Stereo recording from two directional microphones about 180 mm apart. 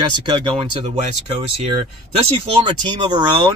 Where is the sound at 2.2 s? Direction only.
25° right (ahead or behind).